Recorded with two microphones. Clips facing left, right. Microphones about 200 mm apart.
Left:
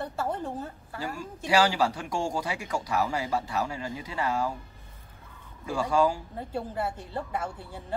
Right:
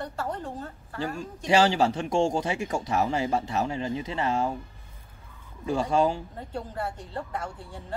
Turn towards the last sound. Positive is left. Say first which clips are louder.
# left 1 dB
turn(degrees=5)  # may be behind; listen again after turning